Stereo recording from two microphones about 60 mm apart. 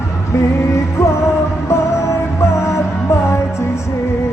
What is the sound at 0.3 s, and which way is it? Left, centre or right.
Music, left.